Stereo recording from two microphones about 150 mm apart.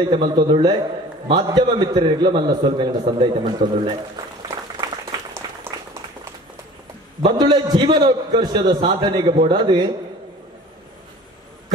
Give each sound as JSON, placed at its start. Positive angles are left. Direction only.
{"t": 0.1, "sound": "a man's voice", "side_deg": -35}
{"t": 4.4, "sound": "applause", "side_deg": -25}
{"t": 5.4, "sound": "a sound", "side_deg": -30}
{"t": 7.2, "sound": "a man's voice", "side_deg": -30}